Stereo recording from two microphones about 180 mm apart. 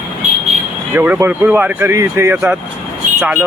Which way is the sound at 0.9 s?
10° right (ahead or behind).